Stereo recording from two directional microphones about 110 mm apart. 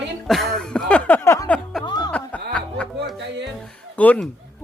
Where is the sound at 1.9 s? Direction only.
40° left (ahead or behind).